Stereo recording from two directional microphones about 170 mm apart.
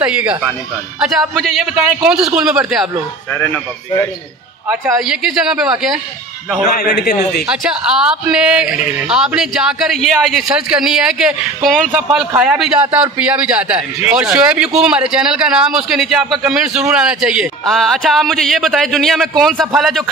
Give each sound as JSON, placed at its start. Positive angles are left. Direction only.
{"t": 0.0, "sound": "a man's voice", "side_deg": -5}
{"t": 3.3, "sound": "speech", "side_deg": 10}
{"t": 4.6, "sound": "a man's voice", "side_deg": -20}
{"t": 5.0, "sound": "speech", "side_deg": -5}
{"t": 6.8, "sound": "a man's voice", "side_deg": 55}
{"t": 7.4, "sound": "a man's voice", "side_deg": -5}